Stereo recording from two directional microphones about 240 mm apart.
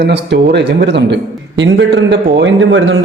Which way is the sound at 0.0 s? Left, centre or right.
Right.